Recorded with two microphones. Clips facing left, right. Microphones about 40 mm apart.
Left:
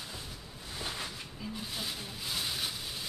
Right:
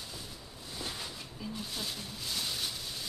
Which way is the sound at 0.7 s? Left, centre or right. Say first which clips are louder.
Left 2 dB; left.